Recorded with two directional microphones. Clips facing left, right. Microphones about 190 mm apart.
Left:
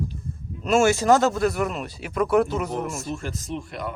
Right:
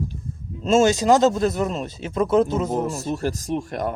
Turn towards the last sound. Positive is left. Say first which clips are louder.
# right 6 dB
turn(degrees=-45)  # may be behind; listen again after turning